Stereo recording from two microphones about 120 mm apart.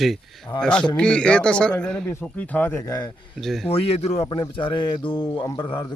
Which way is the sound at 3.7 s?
55° left (ahead or behind).